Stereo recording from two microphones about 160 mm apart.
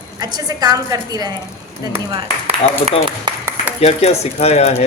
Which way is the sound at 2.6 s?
45° left (ahead or behind).